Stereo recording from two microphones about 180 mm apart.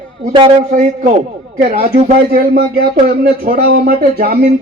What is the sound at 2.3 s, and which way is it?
Speech, 60° right (ahead or behind).